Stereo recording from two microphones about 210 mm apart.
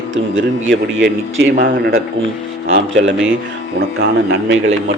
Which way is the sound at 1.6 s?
45° right (ahead or behind).